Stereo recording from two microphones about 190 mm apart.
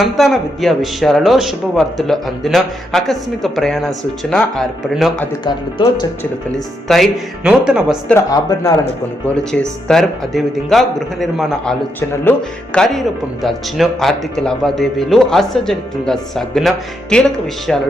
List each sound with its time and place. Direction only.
0.0 s speech: centre (ahead or behind)
5.5 s speech: 25° left (ahead or behind)
6.8 s speech: centre (ahead or behind)
8.0 s speech: 15° left (ahead or behind)
9.2 s speech: 5° left (ahead or behind)